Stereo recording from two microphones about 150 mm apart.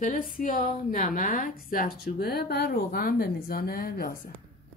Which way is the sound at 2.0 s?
90° left.